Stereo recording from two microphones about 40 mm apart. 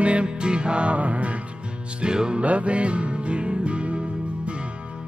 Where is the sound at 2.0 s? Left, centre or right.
Right.